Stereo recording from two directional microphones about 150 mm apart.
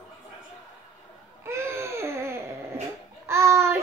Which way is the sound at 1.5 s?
20° right (ahead or behind).